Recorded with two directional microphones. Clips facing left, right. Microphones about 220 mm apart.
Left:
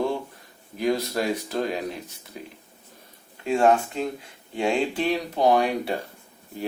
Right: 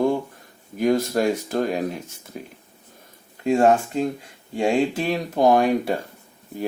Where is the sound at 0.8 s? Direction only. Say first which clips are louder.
Right 5 dB; 45° right (ahead or behind).